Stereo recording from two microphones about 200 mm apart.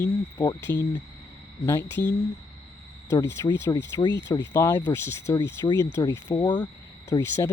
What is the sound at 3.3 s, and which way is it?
Speech, 15° left (ahead or behind).